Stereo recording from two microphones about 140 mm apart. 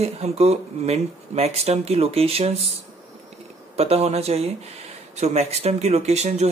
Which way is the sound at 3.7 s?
45° right (ahead or behind).